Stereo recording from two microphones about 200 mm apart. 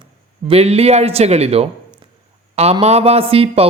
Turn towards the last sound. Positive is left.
turn(degrees=-30)  # may be behind; listen again after turning